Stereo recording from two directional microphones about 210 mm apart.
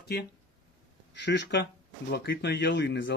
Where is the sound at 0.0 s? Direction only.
50° left (ahead or behind).